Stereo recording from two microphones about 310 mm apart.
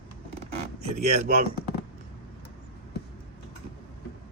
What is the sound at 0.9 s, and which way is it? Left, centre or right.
Speech, right.